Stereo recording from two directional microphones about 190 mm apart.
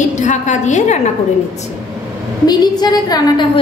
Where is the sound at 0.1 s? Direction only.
40° left (ahead or behind).